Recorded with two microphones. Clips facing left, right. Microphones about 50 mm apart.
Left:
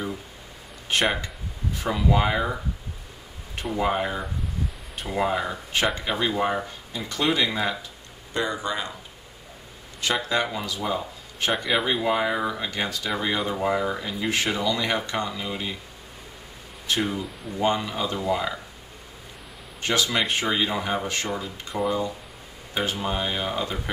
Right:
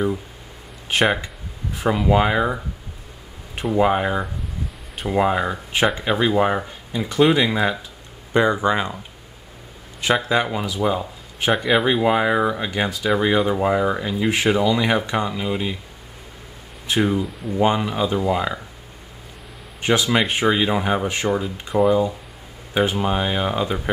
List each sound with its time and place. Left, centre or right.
0.8 s speech: centre
3.7 s speech: right
10.2 s speech: right
11.5 s speech: centre
11.8 s speech: right
16.8 s speech: centre
19.8 s speech: centre
22.8 s speech: right